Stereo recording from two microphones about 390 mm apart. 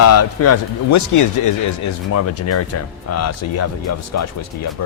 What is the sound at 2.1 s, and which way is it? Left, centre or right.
Speech, left.